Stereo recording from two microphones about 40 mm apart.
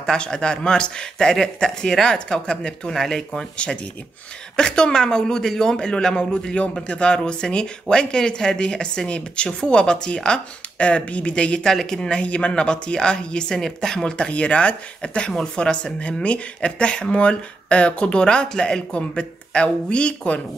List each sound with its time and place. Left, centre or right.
0.0 s speech: centre
3.5 s speech: left